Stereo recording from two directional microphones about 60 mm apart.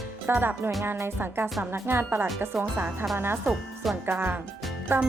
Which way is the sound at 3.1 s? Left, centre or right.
Right.